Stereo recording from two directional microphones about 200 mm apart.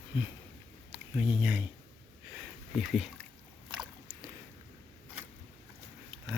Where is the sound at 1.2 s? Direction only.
5° right (ahead or behind).